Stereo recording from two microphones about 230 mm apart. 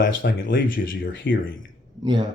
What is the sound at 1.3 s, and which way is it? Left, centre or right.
Speech, left.